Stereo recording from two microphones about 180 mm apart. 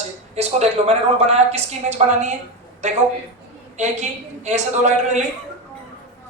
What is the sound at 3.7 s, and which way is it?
Speech, 40° right (ahead or behind).